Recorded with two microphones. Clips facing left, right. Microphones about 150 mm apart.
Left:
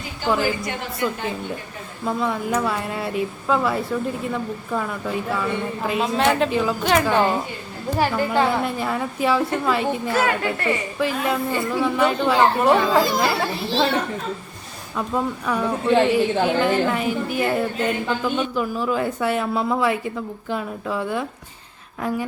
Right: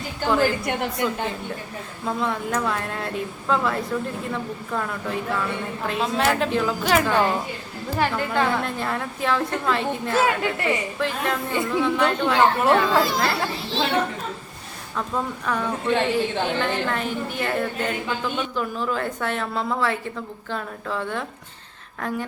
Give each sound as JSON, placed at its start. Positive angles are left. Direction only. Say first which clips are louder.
{"t": 0.3, "sound": "a woman's voice", "louder": "right 1 dB", "side_deg": 5}
{"t": 0.6, "sound": "a woman's voice", "louder": "right 3 dB", "side_deg": -60}
{"t": 2.0, "sound": "a woman's voice", "louder": "left 3 dB", "side_deg": 5}
{"t": 14.9, "sound": "a woman's voice", "louder": "left 3 dB", "side_deg": 10}